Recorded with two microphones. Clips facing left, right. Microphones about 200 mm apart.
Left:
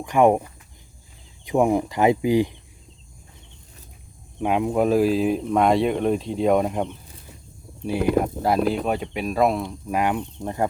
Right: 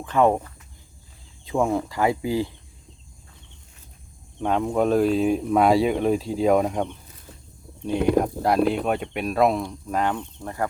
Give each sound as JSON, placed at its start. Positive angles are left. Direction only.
{"t": 0.0, "sound": "speech", "side_deg": 15}
{"t": 4.4, "sound": "speech", "side_deg": 10}